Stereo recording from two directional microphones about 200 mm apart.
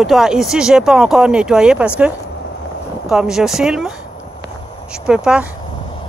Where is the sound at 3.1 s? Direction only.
Centre (ahead or behind).